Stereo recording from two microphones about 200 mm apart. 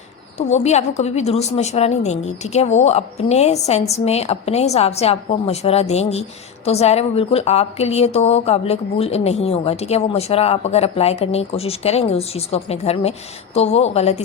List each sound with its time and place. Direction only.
0.3 s a woman's voice: 35° left (ahead or behind)